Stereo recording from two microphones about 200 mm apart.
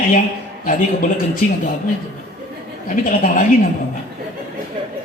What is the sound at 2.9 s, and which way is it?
Speech, 45° left (ahead or behind).